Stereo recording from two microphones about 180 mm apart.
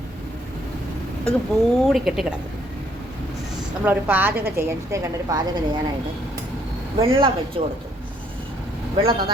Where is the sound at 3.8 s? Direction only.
10° right (ahead or behind).